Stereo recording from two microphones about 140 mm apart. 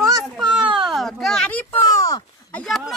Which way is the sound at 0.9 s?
Centre (ahead or behind).